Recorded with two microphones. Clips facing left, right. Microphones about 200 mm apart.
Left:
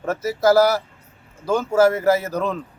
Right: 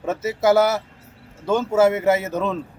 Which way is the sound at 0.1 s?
20° right (ahead or behind).